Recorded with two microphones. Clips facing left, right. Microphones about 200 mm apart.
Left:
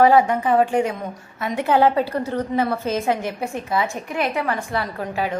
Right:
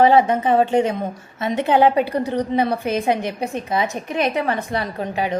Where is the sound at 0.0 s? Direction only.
20° right (ahead or behind).